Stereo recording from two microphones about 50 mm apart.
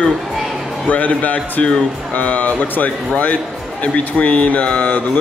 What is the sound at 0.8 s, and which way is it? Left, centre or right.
Speech, left.